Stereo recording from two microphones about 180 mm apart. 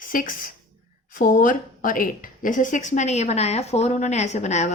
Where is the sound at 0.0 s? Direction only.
50° left (ahead or behind).